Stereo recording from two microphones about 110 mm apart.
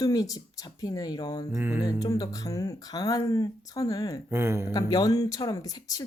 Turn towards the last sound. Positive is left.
turn(degrees=30)  # may be behind; listen again after turning